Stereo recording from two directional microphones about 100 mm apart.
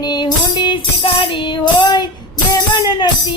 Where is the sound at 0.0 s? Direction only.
45° left (ahead or behind).